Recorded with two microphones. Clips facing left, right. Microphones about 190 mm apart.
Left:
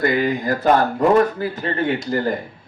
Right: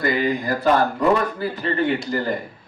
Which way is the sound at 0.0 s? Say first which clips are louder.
Left 2 dB; 45° left (ahead or behind).